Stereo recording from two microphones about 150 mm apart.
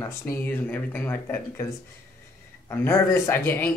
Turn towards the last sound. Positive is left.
turn(degrees=15)  # may be behind; listen again after turning